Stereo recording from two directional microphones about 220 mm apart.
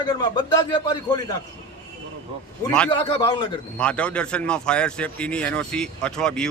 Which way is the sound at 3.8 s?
5° left (ahead or behind).